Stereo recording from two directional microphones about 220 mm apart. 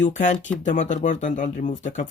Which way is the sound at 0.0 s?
35° left (ahead or behind).